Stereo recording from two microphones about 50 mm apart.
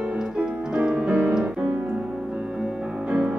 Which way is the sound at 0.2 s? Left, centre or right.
Centre.